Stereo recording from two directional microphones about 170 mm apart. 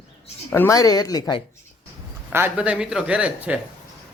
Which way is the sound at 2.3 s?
10° right (ahead or behind).